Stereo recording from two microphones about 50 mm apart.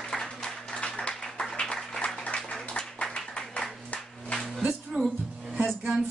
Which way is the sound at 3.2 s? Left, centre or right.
Centre.